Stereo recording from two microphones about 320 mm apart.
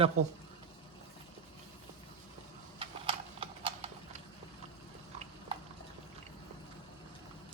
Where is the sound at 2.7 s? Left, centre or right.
Centre.